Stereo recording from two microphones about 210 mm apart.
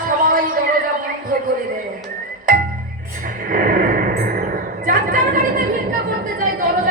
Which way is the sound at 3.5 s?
40° right (ahead or behind).